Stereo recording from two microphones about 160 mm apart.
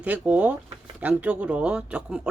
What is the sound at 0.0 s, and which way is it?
A woman's voice, 10° right (ahead or behind).